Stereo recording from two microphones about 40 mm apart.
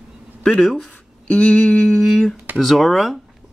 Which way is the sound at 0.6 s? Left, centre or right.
Centre.